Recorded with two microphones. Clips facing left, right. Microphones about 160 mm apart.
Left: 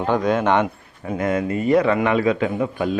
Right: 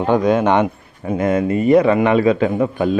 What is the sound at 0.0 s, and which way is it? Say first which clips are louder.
Speech: right 4 dB; 20° right (ahead or behind).